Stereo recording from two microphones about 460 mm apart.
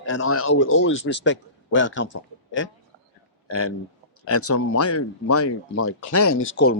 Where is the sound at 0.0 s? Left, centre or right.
Left.